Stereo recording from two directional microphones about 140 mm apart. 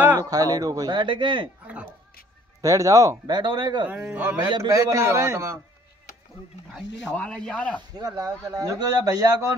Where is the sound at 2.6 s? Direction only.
25° right (ahead or behind).